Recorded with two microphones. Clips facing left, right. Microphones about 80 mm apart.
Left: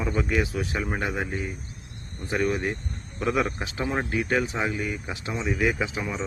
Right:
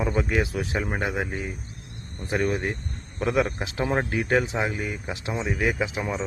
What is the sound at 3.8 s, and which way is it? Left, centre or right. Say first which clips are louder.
Speech: right 2 dB; right.